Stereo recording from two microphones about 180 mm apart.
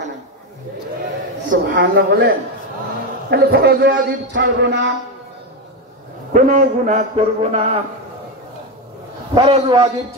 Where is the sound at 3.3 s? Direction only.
65° right (ahead or behind).